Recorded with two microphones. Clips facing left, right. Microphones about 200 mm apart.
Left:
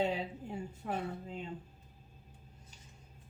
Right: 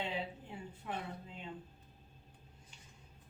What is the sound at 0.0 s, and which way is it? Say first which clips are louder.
Speech: left 6 dB; 45° left (ahead or behind).